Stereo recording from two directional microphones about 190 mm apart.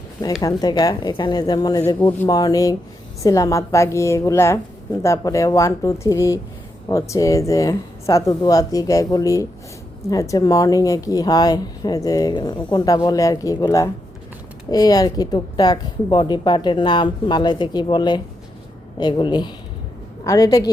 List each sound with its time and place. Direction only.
0.4 s a woman's voice: 20° left (ahead or behind)